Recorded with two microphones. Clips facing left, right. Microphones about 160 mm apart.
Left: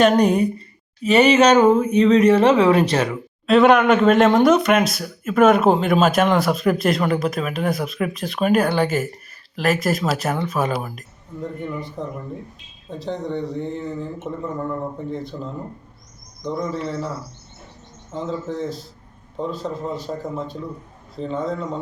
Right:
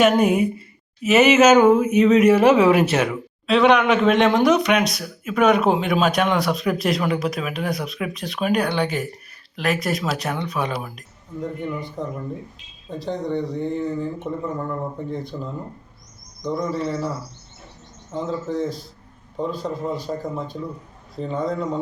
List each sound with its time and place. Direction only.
0.0 s speech: 5° right (ahead or behind)
1.5 s a sound: 30° left (ahead or behind)
2.0 s speech: 10° right (ahead or behind)
3.4 s speech: centre (ahead or behind)
16.4 s speech: centre (ahead or behind)
18.1 s speech: centre (ahead or behind)